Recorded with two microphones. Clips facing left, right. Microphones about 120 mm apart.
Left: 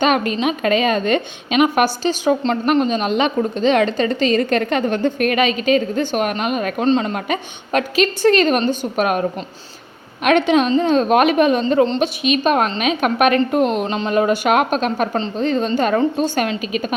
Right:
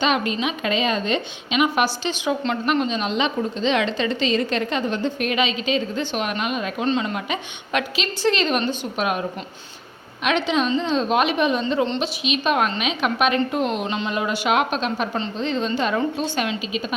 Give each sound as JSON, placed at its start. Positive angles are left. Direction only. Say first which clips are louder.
{"t": 0.0, "sound": "a woman's voice", "louder": "left 5 dB", "side_deg": 50}
{"t": 6.8, "sound": "a woman's voice", "louder": "left 6 dB", "side_deg": 40}
{"t": 10.2, "sound": "a woman's voice", "louder": "left 6 dB", "side_deg": 55}